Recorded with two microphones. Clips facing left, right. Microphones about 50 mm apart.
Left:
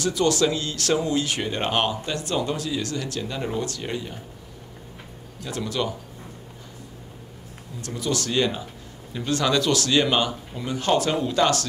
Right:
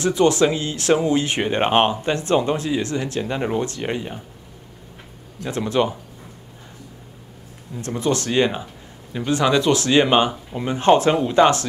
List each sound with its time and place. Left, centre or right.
0.0 s speech: right
5.4 s speech: right
7.8 s speech: right